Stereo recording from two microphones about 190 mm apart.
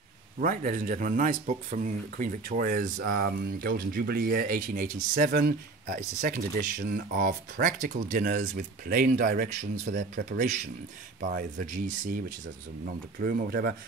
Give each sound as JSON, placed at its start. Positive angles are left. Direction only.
{"t": 0.4, "sound": "speech", "side_deg": -45}
{"t": 13.2, "sound": "speech", "side_deg": -50}